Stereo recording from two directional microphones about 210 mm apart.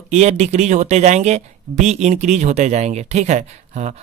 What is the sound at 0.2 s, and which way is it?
Speech, 30° right (ahead or behind).